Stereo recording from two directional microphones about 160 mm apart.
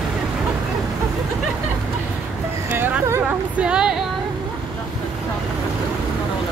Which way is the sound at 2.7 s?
15° right (ahead or behind).